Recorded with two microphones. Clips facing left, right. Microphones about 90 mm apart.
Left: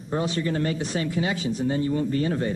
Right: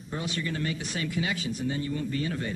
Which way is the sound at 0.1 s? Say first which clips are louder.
Left 7 dB; 35° left (ahead or behind).